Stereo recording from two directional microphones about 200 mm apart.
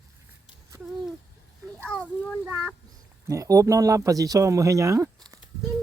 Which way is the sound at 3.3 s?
15° right (ahead or behind).